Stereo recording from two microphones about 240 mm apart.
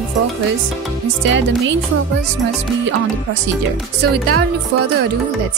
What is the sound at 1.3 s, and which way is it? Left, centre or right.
Speech, right.